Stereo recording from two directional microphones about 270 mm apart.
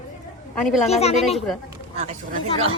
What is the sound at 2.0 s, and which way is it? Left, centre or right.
Speech, right.